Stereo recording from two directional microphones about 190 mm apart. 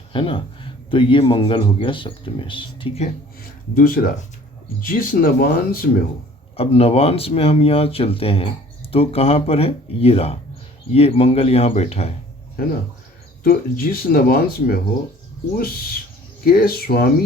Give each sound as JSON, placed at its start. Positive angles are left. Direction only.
{"t": 0.1, "sound": "speech", "side_deg": 25}
{"t": 3.8, "sound": "speech", "side_deg": 50}
{"t": 6.6, "sound": "speech", "side_deg": 30}
{"t": 13.4, "sound": "speech", "side_deg": 50}
{"t": 16.5, "sound": "speech", "side_deg": 55}